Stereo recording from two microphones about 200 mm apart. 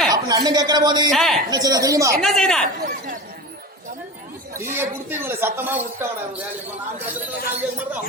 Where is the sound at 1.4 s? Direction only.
20° right (ahead or behind).